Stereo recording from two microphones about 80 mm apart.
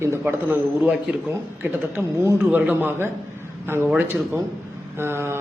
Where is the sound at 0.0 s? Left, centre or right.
Right.